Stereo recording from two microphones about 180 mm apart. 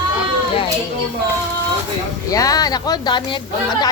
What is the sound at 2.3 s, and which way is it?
Speech, 20° left (ahead or behind).